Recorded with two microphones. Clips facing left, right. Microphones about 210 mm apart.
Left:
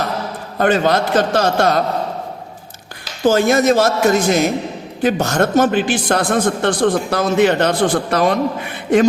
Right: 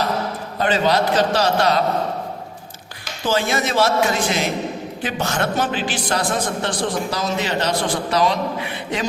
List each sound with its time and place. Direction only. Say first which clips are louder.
0.6 s a man's voice: left 3 dB; 50° left (ahead or behind)
3.2 s a man's voice: left 8 dB; 45° left (ahead or behind)